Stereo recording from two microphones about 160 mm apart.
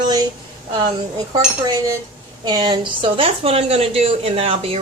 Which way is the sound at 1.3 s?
20° right (ahead or behind).